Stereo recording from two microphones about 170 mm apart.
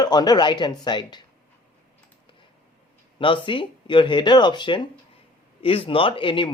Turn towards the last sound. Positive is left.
turn(degrees=30)  # may be behind; listen again after turning